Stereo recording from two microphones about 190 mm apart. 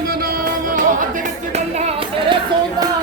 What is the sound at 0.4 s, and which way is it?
Music, 45° right (ahead or behind).